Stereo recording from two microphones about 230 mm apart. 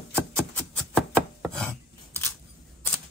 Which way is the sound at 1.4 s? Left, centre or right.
Centre.